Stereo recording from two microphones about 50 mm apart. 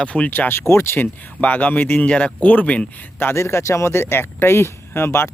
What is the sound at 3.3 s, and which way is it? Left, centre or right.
Speech, left.